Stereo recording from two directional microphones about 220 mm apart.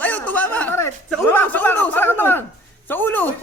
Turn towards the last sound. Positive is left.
turn(degrees=10)  # may be behind; listen again after turning